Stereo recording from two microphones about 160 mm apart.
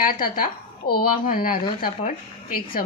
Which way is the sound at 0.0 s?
60° left (ahead or behind).